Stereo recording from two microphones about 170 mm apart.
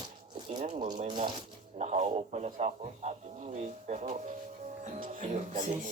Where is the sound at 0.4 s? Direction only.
45° right (ahead or behind).